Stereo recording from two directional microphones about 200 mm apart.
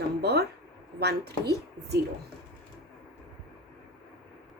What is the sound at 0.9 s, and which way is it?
A woman's voice, 55° right (ahead or behind).